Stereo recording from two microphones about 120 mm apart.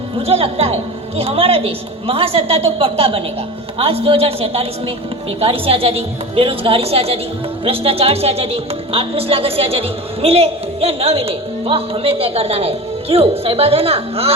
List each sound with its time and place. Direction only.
0.2 s a woman's voice: 55° right (ahead or behind)